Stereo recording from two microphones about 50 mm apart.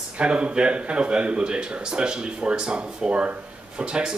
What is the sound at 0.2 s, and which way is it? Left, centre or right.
Speech, right.